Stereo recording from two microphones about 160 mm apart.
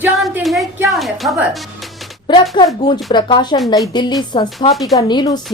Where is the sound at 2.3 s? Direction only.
30° left (ahead or behind).